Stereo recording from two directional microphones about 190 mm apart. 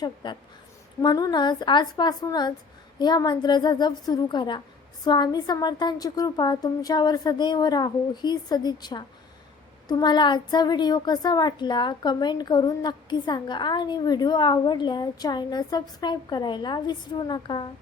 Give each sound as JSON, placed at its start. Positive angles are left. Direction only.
{"t": 0.0, "sound": "a woman's voice", "side_deg": 25}